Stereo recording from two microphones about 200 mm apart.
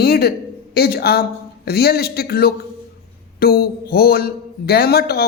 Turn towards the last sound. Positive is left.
turn(degrees=50)  # may be behind; listen again after turning